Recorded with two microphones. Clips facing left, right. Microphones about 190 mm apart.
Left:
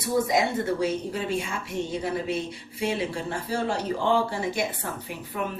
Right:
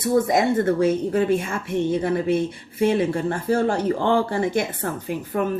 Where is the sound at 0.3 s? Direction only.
50° right (ahead or behind).